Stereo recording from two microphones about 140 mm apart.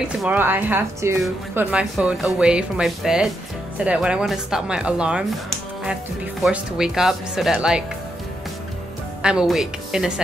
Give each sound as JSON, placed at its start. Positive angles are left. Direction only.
{"t": 0.3, "sound": "speech", "side_deg": -15}
{"t": 6.4, "sound": "speech", "side_deg": -5}
{"t": 9.2, "sound": "speech", "side_deg": -5}